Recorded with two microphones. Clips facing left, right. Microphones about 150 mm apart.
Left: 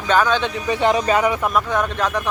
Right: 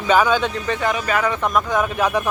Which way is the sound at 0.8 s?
30° left (ahead or behind).